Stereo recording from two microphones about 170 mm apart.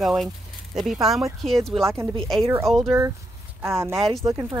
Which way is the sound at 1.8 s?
15° right (ahead or behind).